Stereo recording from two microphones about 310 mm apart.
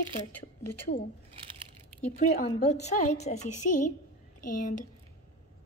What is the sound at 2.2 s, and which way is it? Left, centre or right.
A woman's voice, left.